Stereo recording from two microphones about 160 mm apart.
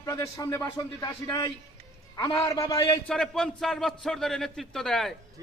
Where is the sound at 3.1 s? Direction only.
5° left (ahead or behind).